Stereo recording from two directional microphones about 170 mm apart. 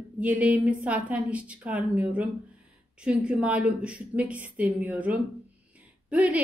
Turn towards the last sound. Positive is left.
turn(degrees=-10)  # may be behind; listen again after turning